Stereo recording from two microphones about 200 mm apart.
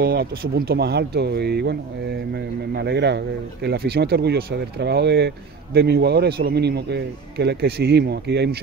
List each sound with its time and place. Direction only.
0.0 s speech: 50° right (ahead or behind)